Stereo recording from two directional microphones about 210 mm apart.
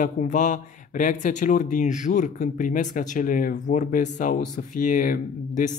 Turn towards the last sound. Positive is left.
turn(degrees=40)  # may be behind; listen again after turning